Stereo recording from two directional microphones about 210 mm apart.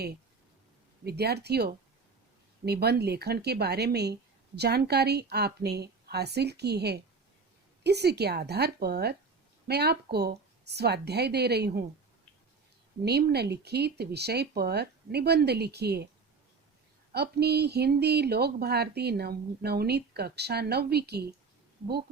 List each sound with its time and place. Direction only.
1.0 s speech: 50° right (ahead or behind)
13.1 s speech: 50° right (ahead or behind)
17.1 s speech: 50° right (ahead or behind)